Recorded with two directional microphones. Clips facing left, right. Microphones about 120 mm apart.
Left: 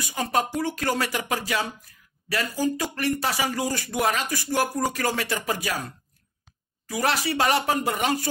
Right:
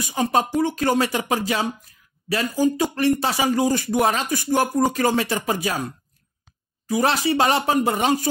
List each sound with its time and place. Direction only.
0.1 s speech: 25° right (ahead or behind)
6.9 s speech: 25° right (ahead or behind)